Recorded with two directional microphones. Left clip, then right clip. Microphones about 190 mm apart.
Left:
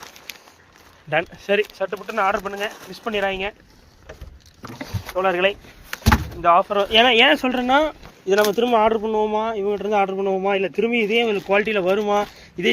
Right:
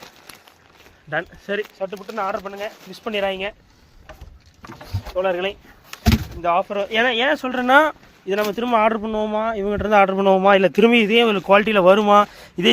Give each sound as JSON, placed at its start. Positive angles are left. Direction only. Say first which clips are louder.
{"t": 1.1, "sound": "speech", "louder": "left 4 dB", "side_deg": 15}
{"t": 2.9, "sound": "speech", "louder": "right 1 dB", "side_deg": -10}
{"t": 5.1, "sound": "speech", "louder": "left 2 dB", "side_deg": 20}
{"t": 6.4, "sound": "speech", "louder": "left 3 dB", "side_deg": 0}
{"t": 7.7, "sound": "speech", "louder": "right 5 dB", "side_deg": -25}
{"t": 8.3, "sound": "speech", "louder": "left 3 dB", "side_deg": -10}
{"t": 8.9, "sound": "speech", "louder": "left 2 dB", "side_deg": -30}
{"t": 9.6, "sound": "speech", "louder": "right 8 dB", "side_deg": -40}